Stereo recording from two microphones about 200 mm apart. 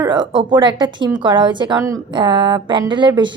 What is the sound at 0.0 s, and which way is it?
A woman's voice, 20° right (ahead or behind).